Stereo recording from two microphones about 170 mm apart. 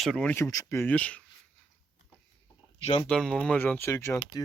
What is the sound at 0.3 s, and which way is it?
Speech, 15° left (ahead or behind).